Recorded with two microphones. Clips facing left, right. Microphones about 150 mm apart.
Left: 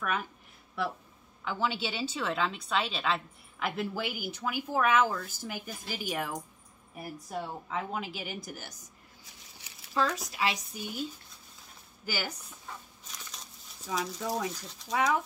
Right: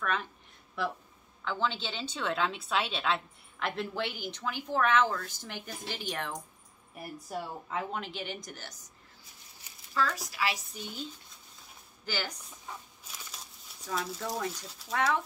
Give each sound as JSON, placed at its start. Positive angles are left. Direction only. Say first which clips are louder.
{"t": 0.0, "sound": "speech", "louder": "even", "side_deg": 10}
{"t": 1.4, "sound": "a woman's voice", "louder": "left 1 dB", "side_deg": 5}
{"t": 9.9, "sound": "speech", "louder": "left 2 dB", "side_deg": 20}
{"t": 10.7, "sound": "a woman's voice", "louder": "left 4 dB", "side_deg": 10}
{"t": 12.1, "sound": "a woman's voice", "louder": "left 1 dB", "side_deg": 10}
{"t": 13.8, "sound": "speech", "louder": "left 2 dB", "side_deg": 0}